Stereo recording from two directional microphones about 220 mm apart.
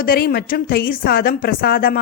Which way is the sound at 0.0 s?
40° left (ahead or behind).